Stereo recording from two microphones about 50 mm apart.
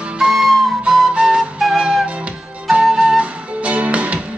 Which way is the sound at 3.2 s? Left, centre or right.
Right.